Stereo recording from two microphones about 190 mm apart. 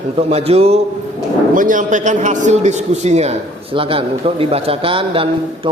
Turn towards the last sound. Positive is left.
turn(degrees=-30)  # may be behind; listen again after turning